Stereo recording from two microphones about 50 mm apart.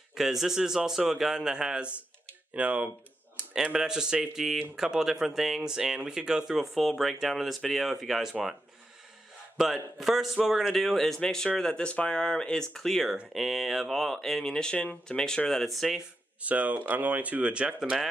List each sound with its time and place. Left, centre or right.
0.1 s speech: centre
2.5 s speech: right
3.6 s speech: centre
9.6 s speech: centre
16.3 s speech: right